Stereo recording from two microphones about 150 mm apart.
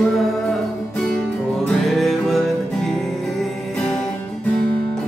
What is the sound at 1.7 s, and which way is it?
Music, centre (ahead or behind).